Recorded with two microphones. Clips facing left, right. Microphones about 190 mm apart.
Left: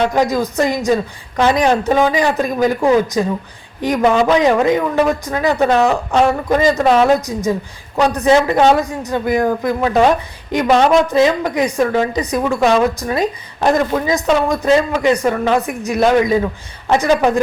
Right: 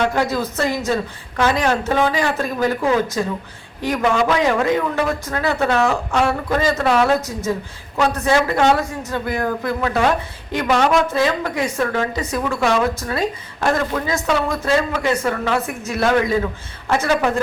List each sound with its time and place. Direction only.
0.0 s a woman's voice: 15° left (ahead or behind)